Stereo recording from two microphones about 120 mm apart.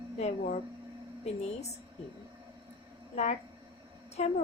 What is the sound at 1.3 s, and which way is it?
Speech, 65° left (ahead or behind).